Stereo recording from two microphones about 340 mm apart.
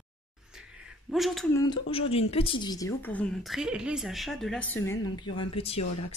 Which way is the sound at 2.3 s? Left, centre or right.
Centre.